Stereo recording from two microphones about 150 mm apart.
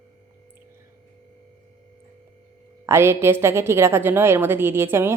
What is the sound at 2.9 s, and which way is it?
A woman's voice, 15° right (ahead or behind).